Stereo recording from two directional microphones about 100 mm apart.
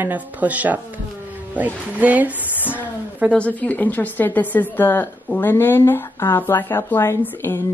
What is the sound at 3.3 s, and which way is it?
Speech, 15° left (ahead or behind).